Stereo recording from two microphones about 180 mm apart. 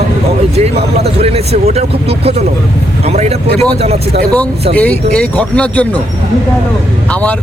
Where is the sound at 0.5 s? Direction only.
35° right (ahead or behind).